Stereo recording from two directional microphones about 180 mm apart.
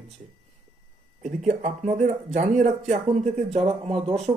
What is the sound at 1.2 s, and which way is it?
Speech, 40° right (ahead or behind).